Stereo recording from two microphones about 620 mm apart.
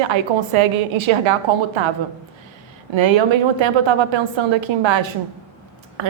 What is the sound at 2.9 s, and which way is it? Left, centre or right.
A woman's voice, right.